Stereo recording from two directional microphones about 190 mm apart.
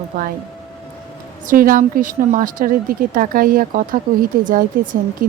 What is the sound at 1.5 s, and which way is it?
A woman's voice, 45° right (ahead or behind).